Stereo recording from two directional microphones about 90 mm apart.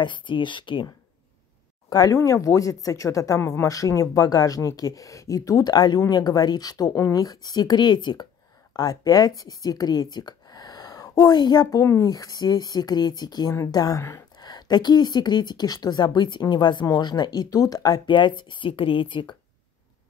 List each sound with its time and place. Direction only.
0.0 s speech: 65° left (ahead or behind)
1.9 s a woman's voice: 45° left (ahead or behind)
13.5 s a woman's voice: 40° left (ahead or behind); by 19.3 s 70° left (ahead or behind)